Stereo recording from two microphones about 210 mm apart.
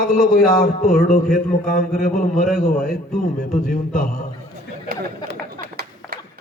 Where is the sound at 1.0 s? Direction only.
35° left (ahead or behind).